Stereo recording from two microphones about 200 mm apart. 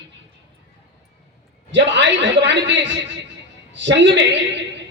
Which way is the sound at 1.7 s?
65° right (ahead or behind).